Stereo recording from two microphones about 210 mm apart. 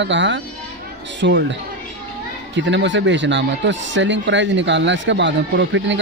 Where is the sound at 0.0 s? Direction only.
60° right (ahead or behind).